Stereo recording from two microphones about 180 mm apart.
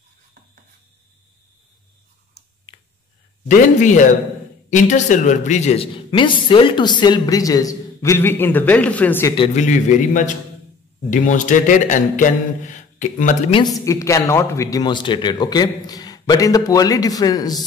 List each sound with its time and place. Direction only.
3.4 s a man's voice: 45° left (ahead or behind); by 9.3 s 10° left (ahead or behind)
9.6 s a man's voice: 45° left (ahead or behind)
13.7 s a man's voice: 15° left (ahead or behind)